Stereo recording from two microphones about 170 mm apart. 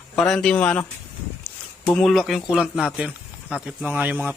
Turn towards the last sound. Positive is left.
turn(degrees=-10)  # may be behind; listen again after turning